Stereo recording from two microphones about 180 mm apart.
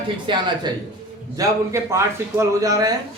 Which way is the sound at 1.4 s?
15° right (ahead or behind).